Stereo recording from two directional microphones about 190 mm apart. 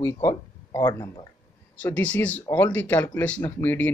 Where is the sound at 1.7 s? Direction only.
10° left (ahead or behind).